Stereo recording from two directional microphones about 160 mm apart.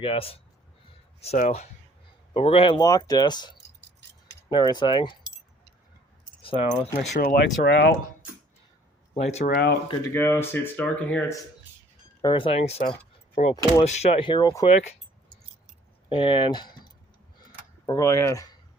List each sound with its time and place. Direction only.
0.0 s speech: 35° left (ahead or behind)
2.3 s speech: 35° left (ahead or behind)
6.4 s keys jangling: 35° left (ahead or behind)
6.7 s speech: 45° left (ahead or behind)
7.2 s speech: 70° left (ahead or behind); by 7.9 s 90° left
9.1 s speech: 40° left (ahead or behind)
9.5 s speech: 80° left
10.0 s speech: 15° left (ahead or behind)
12.2 s speech: 35° left (ahead or behind)
14.7 s speech: 45° left (ahead or behind)
16.0 s speech: 35° left (ahead or behind)
17.4 s tick-tock: 25° left (ahead or behind)